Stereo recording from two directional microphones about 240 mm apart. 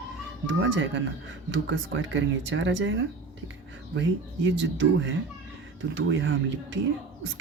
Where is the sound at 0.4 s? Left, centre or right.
Right.